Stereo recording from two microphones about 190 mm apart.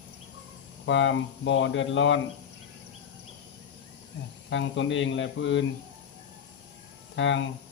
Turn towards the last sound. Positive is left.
turn(degrees=75)  # may be behind; listen again after turning